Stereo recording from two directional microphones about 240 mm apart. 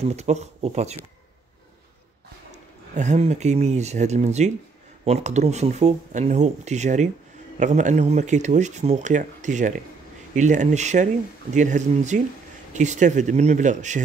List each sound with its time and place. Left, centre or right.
0.0 s speech: right
2.9 s speech: right